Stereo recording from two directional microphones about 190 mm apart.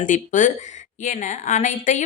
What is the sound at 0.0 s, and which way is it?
A woman's voice, 40° left (ahead or behind).